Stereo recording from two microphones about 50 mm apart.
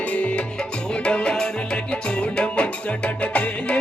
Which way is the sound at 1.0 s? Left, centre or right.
Left.